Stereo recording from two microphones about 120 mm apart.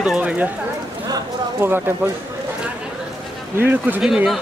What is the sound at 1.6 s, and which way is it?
Speech, 20° right (ahead or behind).